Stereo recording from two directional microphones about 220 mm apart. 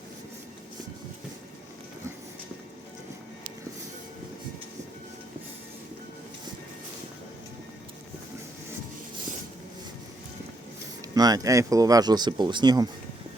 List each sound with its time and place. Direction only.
11.1 s speech: 15° right (ahead or behind)